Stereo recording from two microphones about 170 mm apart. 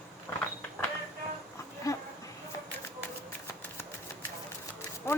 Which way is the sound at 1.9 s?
20° left (ahead or behind).